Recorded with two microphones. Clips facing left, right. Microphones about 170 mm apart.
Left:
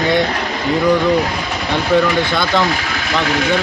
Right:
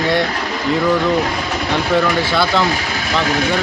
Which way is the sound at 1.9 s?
Centre (ahead or behind).